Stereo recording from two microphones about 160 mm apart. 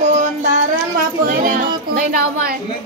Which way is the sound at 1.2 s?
55° right (ahead or behind).